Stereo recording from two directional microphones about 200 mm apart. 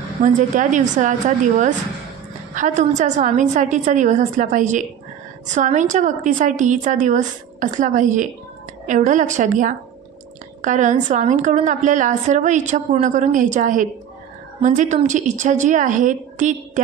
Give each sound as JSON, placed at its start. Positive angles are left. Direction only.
{"t": 0.2, "sound": "a woman's voice", "side_deg": -40}